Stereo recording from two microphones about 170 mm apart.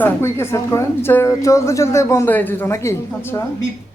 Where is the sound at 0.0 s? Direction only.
15° left (ahead or behind).